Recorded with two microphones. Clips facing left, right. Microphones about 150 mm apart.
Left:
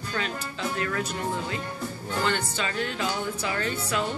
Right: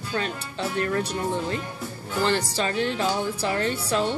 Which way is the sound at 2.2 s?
35° right (ahead or behind).